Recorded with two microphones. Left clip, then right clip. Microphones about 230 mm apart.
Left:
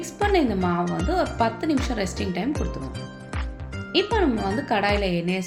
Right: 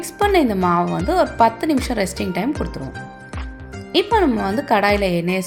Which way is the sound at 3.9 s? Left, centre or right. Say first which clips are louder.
Right 5 dB; right.